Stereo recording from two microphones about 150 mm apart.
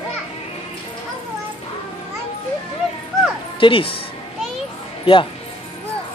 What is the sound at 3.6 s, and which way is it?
Speech, 35° left (ahead or behind).